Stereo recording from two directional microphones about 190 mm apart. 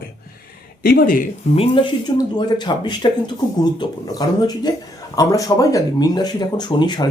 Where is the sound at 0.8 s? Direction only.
50° left (ahead or behind).